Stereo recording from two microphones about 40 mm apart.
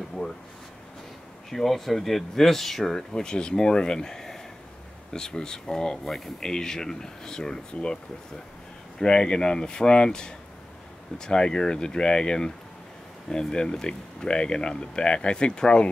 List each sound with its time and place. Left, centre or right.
0.2 s a sound: left
1.5 s speech: centre
9.0 s speech: left